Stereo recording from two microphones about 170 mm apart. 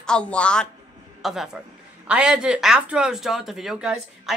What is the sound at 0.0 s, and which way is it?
Speech, 5° left (ahead or behind).